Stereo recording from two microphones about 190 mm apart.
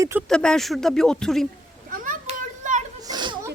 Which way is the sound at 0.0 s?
15° right (ahead or behind).